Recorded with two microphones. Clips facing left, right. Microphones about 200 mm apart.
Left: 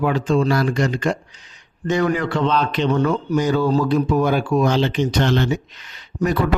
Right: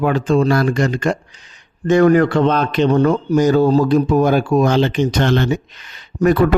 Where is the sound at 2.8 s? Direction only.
35° right (ahead or behind).